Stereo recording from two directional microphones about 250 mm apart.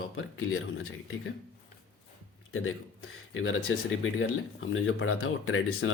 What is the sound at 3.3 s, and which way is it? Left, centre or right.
Speech, left.